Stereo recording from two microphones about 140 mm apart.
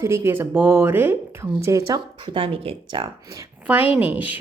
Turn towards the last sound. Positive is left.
turn(degrees=-10)  # may be behind; listen again after turning